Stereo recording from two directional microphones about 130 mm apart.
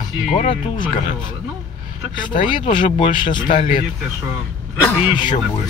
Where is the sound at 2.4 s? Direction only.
40° left (ahead or behind).